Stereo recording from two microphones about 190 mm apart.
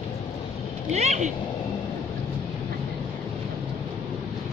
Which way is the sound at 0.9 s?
35° right (ahead or behind).